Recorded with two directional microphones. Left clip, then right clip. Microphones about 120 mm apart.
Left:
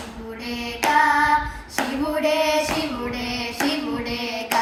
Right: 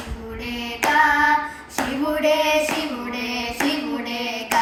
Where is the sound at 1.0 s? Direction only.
15° left (ahead or behind).